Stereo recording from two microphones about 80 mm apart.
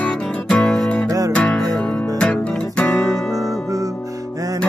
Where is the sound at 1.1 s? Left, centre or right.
Right.